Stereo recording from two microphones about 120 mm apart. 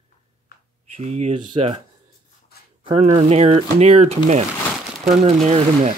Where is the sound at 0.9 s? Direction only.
65° right (ahead or behind).